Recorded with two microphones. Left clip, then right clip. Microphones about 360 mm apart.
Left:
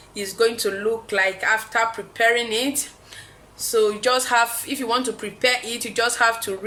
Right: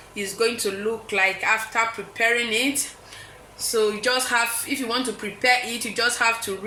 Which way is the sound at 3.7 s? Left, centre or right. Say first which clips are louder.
Left 3 dB; left.